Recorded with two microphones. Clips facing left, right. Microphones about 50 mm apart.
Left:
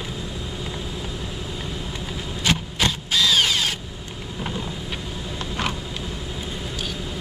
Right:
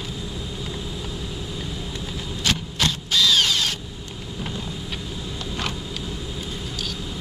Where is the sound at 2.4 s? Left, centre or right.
Centre.